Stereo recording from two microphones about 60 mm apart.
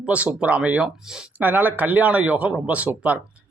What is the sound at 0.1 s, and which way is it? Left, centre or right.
Speech, right.